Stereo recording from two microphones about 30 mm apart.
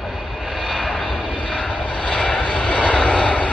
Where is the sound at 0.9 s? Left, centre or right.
Left.